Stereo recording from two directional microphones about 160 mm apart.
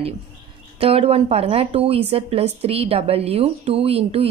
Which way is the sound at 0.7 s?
35° right (ahead or behind).